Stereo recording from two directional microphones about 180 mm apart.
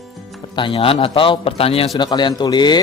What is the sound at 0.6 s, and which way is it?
A man's voice, 30° left (ahead or behind).